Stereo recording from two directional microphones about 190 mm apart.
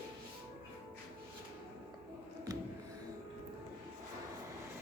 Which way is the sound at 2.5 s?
20° right (ahead or behind).